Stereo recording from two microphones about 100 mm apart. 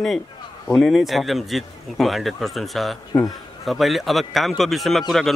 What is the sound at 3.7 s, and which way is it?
Speech, centre (ahead or behind).